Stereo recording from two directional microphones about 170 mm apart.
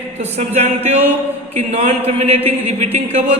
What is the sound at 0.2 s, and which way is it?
Speech, 40° right (ahead or behind).